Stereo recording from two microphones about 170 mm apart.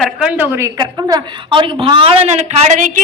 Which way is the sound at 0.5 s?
20° right (ahead or behind).